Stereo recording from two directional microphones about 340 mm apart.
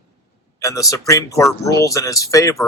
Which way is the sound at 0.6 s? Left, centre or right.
Centre.